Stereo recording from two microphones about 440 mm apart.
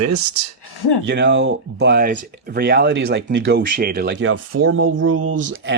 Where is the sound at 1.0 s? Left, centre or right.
Right.